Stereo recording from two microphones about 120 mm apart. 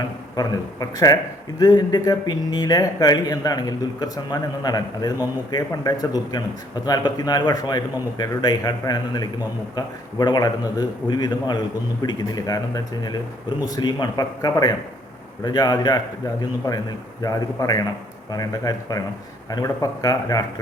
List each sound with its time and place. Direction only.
0.3 s a man's voice: 30° left (ahead or behind)